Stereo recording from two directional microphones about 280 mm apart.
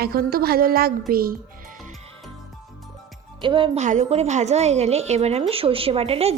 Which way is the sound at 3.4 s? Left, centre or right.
Centre.